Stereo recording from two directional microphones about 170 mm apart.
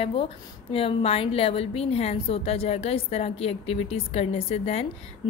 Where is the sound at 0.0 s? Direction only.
35° left (ahead or behind).